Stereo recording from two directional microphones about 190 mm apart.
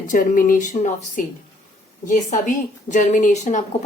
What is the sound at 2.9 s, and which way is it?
Speech, 40° left (ahead or behind).